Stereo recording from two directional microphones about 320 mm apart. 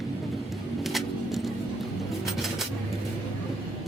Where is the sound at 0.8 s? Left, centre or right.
Centre.